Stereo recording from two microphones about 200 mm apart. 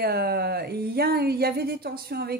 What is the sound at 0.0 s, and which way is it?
A woman's voice, 50° right (ahead or behind).